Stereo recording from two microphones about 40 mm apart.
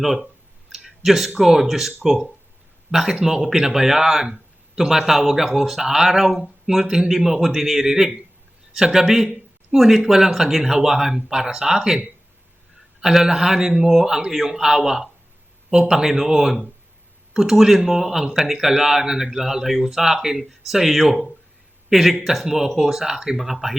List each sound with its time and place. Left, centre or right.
0.0 s speech: centre
0.7 s clicking: centre
1.4 s speech: centre
6.8 s a man's voice: centre
7.4 s speech: centre
13.0 s speech: centre